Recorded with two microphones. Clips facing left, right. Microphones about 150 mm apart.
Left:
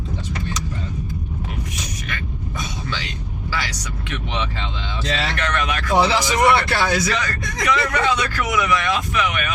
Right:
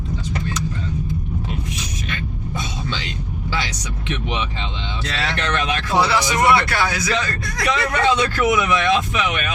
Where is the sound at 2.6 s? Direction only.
25° right (ahead or behind).